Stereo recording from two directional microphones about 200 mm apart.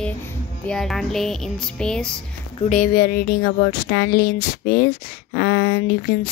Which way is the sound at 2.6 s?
40° left (ahead or behind).